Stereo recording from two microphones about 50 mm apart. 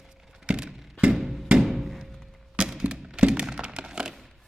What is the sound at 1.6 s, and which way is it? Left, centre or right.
Thunk, centre.